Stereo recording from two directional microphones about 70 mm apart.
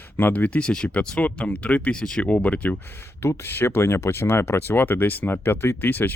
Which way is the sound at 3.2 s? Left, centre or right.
Left.